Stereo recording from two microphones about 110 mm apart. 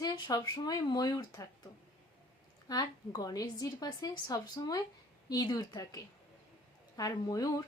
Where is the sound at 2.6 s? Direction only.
35° left (ahead or behind).